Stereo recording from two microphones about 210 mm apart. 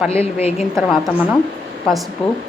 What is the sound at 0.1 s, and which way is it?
Speech, 30° left (ahead or behind).